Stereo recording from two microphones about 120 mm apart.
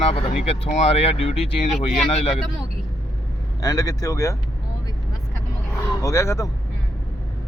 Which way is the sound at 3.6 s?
30° left (ahead or behind).